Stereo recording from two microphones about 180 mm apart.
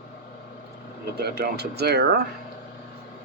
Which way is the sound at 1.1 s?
60° right (ahead or behind).